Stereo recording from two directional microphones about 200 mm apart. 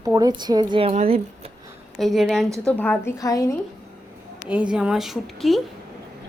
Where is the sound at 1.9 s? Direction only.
Centre (ahead or behind); by 3.5 s 15° left (ahead or behind).